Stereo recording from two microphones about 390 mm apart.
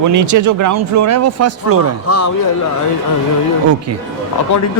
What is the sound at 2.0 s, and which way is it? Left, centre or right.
Speech, left.